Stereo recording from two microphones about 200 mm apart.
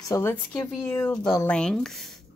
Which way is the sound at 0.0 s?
15° left (ahead or behind).